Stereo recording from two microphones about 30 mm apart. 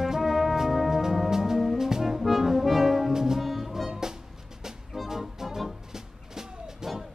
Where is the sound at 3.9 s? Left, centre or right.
Right.